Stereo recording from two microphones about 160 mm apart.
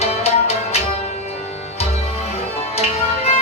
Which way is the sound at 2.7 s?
40° left (ahead or behind).